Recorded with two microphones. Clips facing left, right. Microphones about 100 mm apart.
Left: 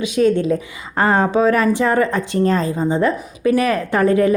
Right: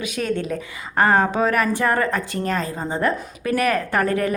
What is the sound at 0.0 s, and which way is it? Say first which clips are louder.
Speech: left 9 dB; 20° left (ahead or behind).